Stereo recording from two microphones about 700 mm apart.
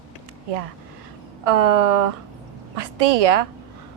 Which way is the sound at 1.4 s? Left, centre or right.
Right.